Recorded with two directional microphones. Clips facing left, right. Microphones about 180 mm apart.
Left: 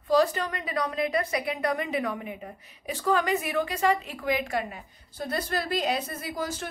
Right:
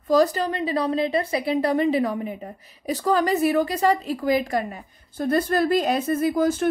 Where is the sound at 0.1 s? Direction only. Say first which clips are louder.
Right 4 dB; 40° right (ahead or behind).